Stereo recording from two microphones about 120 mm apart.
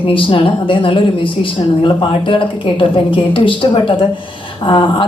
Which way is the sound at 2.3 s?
45° left (ahead or behind).